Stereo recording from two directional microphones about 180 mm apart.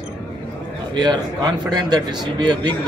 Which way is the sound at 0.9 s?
25° right (ahead or behind).